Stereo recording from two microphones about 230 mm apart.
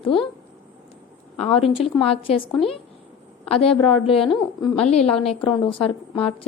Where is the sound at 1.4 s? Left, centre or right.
Left.